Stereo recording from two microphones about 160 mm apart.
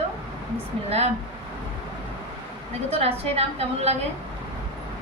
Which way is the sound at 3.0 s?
40° right (ahead or behind).